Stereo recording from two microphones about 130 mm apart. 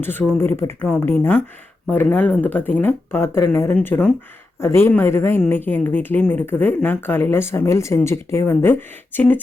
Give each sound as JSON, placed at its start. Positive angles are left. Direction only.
{"t": 0.0, "sound": "a man's voice", "side_deg": 15}